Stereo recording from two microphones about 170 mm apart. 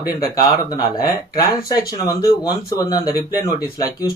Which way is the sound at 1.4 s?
20° left (ahead or behind).